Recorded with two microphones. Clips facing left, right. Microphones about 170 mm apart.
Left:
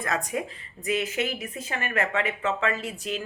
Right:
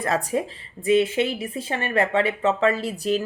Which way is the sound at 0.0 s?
35° right (ahead or behind).